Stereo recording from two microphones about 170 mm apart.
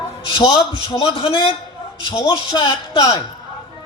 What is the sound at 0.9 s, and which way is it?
A man's voice, 35° left (ahead or behind).